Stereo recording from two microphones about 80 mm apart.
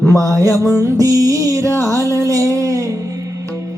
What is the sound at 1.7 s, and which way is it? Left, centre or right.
Music, left.